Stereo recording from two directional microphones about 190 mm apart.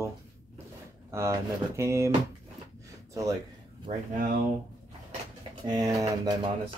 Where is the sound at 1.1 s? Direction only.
15° right (ahead or behind).